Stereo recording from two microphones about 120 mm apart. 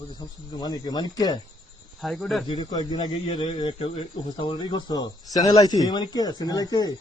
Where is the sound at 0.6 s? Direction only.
35° left (ahead or behind).